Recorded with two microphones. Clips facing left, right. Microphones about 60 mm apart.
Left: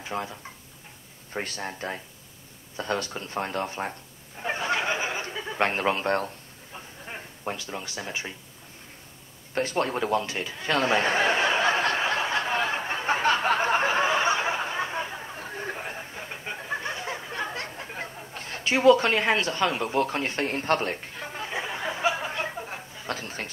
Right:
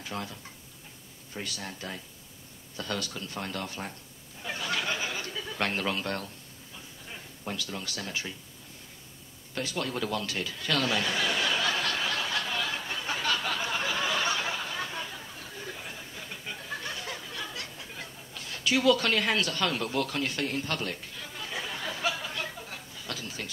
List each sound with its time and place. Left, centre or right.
0.0 s speech: left
1.3 s speech: left
4.4 s a sound: left
9.5 s chuckle: left